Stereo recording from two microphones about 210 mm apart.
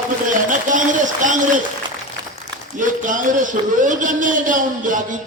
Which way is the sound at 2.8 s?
40° right (ahead or behind).